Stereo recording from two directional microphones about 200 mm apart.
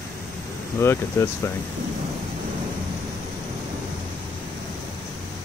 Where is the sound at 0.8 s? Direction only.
15° left (ahead or behind).